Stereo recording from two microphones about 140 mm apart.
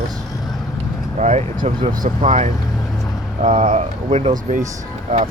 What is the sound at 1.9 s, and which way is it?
Speech, 70° right (ahead or behind).